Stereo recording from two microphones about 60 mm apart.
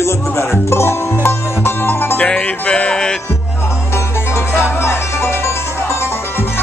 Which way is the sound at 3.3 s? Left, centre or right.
Left.